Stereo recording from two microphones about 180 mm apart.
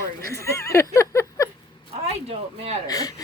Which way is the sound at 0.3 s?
15° left (ahead or behind).